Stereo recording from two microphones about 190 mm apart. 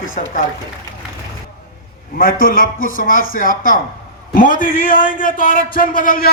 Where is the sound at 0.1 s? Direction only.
45° left (ahead or behind).